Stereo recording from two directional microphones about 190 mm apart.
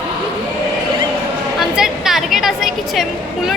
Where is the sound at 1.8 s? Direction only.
Centre (ahead or behind).